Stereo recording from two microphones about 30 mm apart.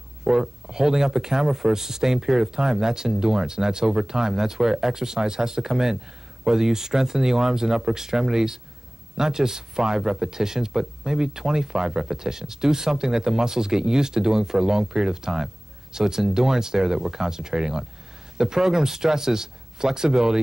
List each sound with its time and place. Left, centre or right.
0.2 s speech: right